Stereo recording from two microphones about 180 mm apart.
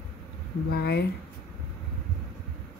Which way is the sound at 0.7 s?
65° left (ahead or behind).